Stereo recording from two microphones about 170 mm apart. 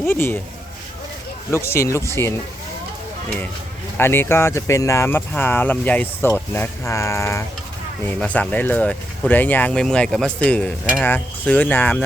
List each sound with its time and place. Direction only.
0.0 s speech: 15° left (ahead or behind)
1.5 s speech: 15° left (ahead or behind)
3.9 s speech: 15° left (ahead or behind)